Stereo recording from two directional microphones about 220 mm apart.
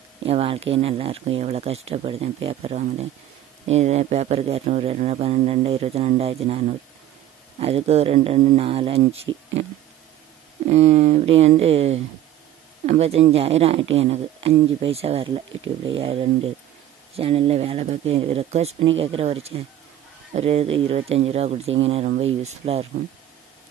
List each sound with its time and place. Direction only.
0.2 s speech: 25° right (ahead or behind)
10.7 s speech: 30° right (ahead or behind)